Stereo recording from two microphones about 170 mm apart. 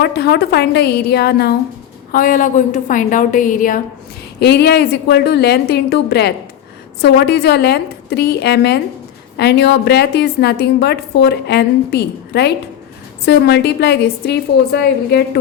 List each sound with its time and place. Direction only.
0.0 s a woman's voice: 70° left (ahead or behind)
2.1 s a woman's voice: 55° left (ahead or behind)
4.4 s a woman's voice: 75° left (ahead or behind)